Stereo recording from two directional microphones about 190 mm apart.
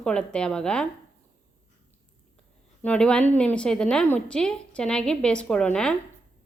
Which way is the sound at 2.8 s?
5° left (ahead or behind).